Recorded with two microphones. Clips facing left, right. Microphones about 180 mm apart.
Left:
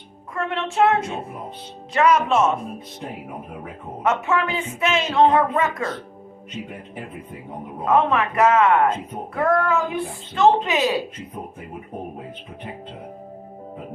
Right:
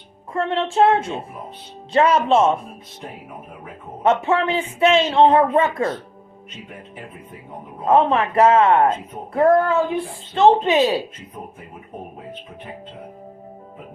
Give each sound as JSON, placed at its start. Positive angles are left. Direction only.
{"t": 0.3, "sound": "speech", "side_deg": -30}
{"t": 4.0, "sound": "speech", "side_deg": -30}
{"t": 7.9, "sound": "speech", "side_deg": -30}